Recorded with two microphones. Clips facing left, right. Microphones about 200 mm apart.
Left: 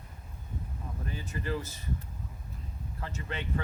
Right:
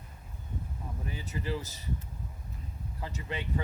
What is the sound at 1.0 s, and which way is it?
Speech, 15° right (ahead or behind).